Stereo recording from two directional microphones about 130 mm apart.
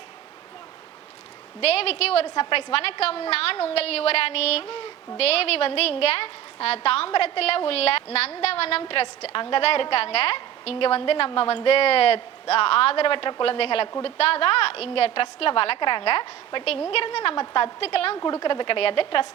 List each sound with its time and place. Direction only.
1.6 s a woman's voice: 50° left (ahead or behind)
18.2 s speech: 30° left (ahead or behind)